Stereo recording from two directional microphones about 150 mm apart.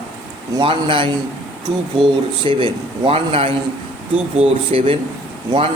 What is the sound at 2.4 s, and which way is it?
A man's voice, 35° right (ahead or behind).